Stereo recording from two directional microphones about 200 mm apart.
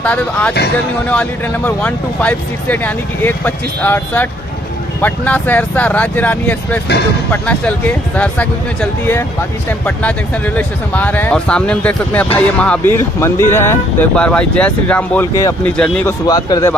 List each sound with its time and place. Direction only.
0.0 s speech: 5° left (ahead or behind)
9.8 s speech: 5° left (ahead or behind)
16.3 s speech: 20° left (ahead or behind)